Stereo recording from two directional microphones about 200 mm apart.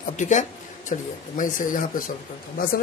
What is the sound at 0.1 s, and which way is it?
A man's voice, 35° left (ahead or behind).